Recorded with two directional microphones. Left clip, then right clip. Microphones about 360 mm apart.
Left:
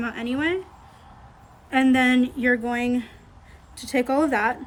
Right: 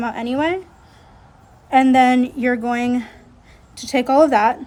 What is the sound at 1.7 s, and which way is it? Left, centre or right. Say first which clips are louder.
A woman's voice: right 7 dB; centre.